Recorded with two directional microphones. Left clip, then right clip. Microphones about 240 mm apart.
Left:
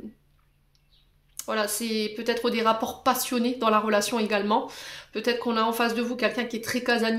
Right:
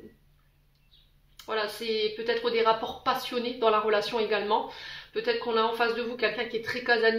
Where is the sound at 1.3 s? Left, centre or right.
Left.